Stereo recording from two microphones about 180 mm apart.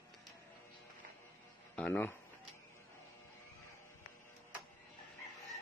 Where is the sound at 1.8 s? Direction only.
10° left (ahead or behind).